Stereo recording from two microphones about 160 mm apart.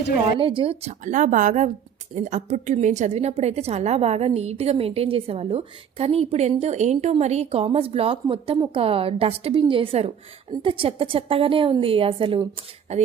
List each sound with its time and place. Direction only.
0.3 s a woman's voice: 35° right (ahead or behind)
12.9 s a woman's voice: 45° right (ahead or behind)